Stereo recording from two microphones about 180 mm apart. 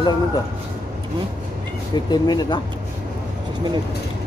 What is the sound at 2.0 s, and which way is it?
Speech, 25° left (ahead or behind).